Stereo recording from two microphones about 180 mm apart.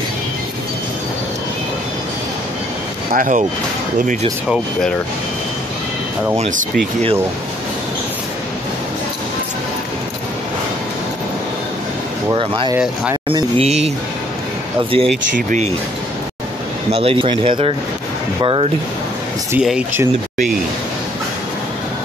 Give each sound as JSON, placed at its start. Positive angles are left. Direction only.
{"t": 3.1, "sound": "speech", "side_deg": -45}
{"t": 6.3, "sound": "speech", "side_deg": -35}
{"t": 12.3, "sound": "speech", "side_deg": -25}
{"t": 15.3, "sound": "speech", "side_deg": -45}
{"t": 16.9, "sound": "speech", "side_deg": -30}
{"t": 19.6, "sound": "speech", "side_deg": -5}